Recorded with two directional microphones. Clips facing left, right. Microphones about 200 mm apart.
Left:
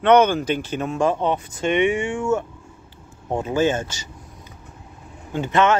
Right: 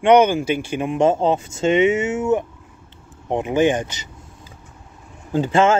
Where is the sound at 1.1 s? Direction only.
25° right (ahead or behind).